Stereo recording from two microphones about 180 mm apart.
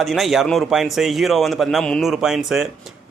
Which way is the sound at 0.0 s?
Centre (ahead or behind).